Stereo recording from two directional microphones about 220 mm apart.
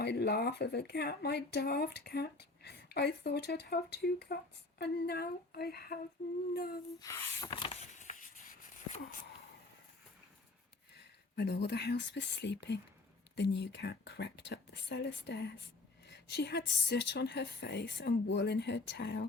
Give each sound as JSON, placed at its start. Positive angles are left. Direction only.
{"t": 0.0, "sound": "speech", "side_deg": 50}
{"t": 7.0, "sound": "a sound", "side_deg": 15}
{"t": 10.9, "sound": "speech", "side_deg": 50}